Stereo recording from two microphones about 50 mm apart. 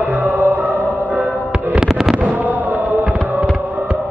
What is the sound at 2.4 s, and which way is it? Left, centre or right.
Music, right.